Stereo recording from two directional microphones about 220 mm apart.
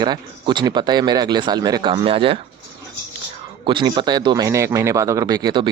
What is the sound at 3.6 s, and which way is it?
Speech, 20° right (ahead or behind).